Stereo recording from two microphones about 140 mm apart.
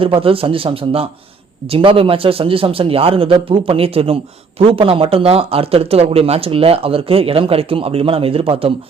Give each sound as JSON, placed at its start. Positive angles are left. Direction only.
{"t": 0.0, "sound": "a man's voice", "side_deg": -40}